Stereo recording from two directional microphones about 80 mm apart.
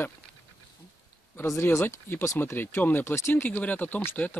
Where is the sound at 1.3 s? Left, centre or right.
Left.